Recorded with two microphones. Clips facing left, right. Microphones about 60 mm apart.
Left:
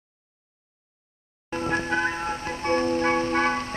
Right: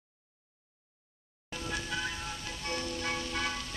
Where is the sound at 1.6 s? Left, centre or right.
Left.